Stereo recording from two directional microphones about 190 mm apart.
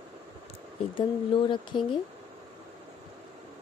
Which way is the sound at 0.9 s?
25° left (ahead or behind).